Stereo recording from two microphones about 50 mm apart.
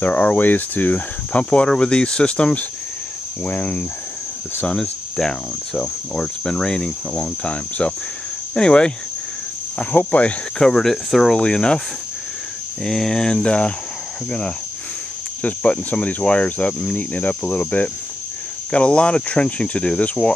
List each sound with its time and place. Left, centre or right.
0.0 s speech: left
3.4 s cricket: left
4.6 s speech: centre
5.8 s cricket: centre
8.5 s cricket: centre
9.8 s speech: left
10.6 s cricket: centre
11.3 s cricket: centre
12.8 s cricket: centre; by 13.7 s left
15.9 s speech: left
16.9 s cricket: left
18.7 s speech: left